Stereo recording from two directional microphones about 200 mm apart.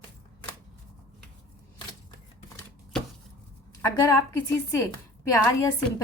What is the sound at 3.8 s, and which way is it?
A woman's voice, 15° left (ahead or behind).